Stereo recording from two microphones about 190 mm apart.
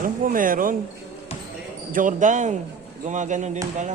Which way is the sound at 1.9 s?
45° right (ahead or behind).